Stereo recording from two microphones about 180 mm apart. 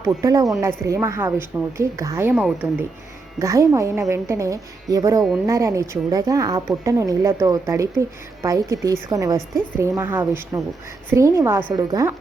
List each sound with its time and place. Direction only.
0.2 s a woman's voice: 20° right (ahead or behind)